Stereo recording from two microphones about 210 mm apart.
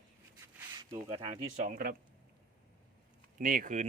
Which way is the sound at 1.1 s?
30° right (ahead or behind).